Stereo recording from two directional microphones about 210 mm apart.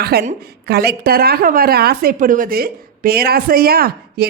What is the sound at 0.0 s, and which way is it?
Speech, 50° right (ahead or behind).